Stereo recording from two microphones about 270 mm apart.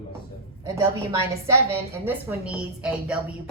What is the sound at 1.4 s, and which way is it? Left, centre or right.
A woman's voice, centre.